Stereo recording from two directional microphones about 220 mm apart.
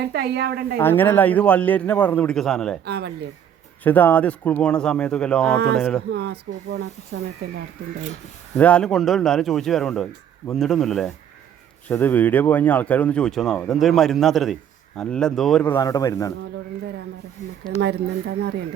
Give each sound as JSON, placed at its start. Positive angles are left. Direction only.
{"t": 0.0, "sound": "speech", "side_deg": -50}
{"t": 0.8, "sound": "a man's voice", "side_deg": 10}
{"t": 2.8, "sound": "speech", "side_deg": -45}
{"t": 3.8, "sound": "speech", "side_deg": 10}
{"t": 6.1, "sound": "speech", "side_deg": -50}
{"t": 8.5, "sound": "speech", "side_deg": 5}
{"t": 17.7, "sound": "speech", "side_deg": -50}